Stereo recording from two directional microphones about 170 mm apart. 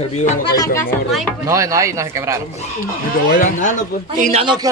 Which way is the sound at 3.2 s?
60° left (ahead or behind).